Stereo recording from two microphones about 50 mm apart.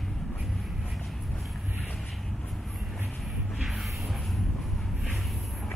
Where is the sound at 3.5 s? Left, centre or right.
Centre.